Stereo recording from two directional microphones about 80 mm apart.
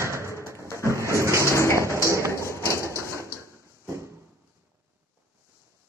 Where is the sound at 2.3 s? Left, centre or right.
Left.